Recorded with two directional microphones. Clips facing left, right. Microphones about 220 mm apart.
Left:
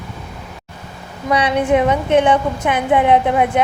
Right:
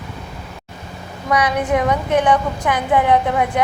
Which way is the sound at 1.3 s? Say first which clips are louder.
Left 3 dB; 25° left (ahead or behind).